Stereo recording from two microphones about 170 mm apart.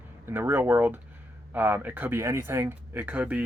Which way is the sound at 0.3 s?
15° right (ahead or behind).